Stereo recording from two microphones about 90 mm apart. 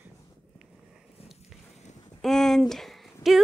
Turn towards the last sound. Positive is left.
turn(degrees=0)  # may be behind; listen again after turning